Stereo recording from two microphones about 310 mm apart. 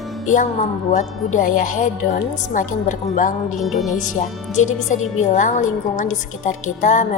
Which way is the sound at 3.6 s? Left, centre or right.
Centre.